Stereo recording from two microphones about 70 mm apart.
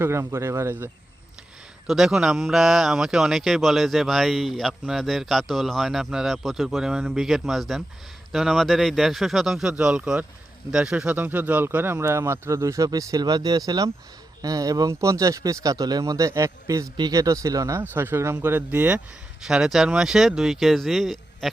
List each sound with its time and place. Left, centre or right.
0.0 s a man's voice: right
1.9 s speech: centre
9.7 s a man's voice: centre; by 17.7 s right
17.9 s a man's voice: right
19.5 s speech: centre